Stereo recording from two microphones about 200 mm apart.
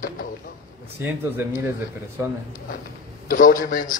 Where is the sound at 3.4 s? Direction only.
45° left (ahead or behind).